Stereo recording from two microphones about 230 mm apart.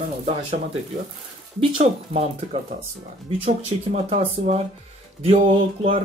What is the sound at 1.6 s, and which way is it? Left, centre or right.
Speech, right.